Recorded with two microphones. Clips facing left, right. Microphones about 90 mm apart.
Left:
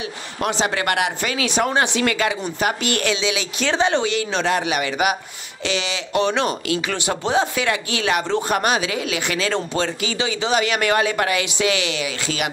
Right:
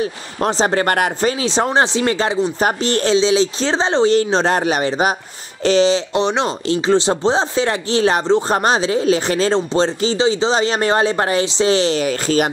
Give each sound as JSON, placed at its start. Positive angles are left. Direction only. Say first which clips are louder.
{"t": 0.0, "sound": "speech", "louder": "right 5 dB", "side_deg": -35}